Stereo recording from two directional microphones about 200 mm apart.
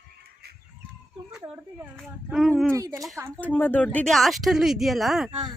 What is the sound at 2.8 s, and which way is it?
Speech, 15° right (ahead or behind).